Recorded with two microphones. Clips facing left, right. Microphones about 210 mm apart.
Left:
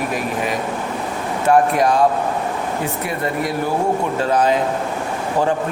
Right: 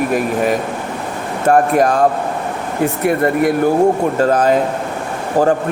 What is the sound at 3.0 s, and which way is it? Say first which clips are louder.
A man's voice: right 11 dB; 55° right (ahead or behind).